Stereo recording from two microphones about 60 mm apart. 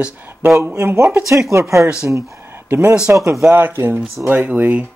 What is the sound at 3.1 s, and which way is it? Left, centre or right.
Speech, right.